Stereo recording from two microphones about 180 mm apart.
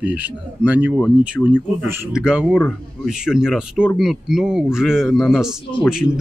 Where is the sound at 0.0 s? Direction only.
10° right (ahead or behind).